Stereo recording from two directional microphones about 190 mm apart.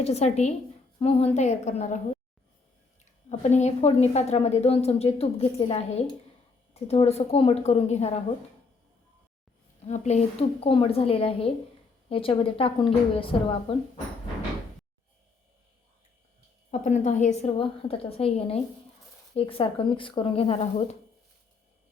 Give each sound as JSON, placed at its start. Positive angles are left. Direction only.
{"t": 0.0, "sound": "a woman's voice", "side_deg": 35}
{"t": 3.0, "sound": "a woman's voice", "side_deg": 40}
{"t": 9.8, "sound": "a woman's voice", "side_deg": 35}
{"t": 16.7, "sound": "a woman's voice", "side_deg": 40}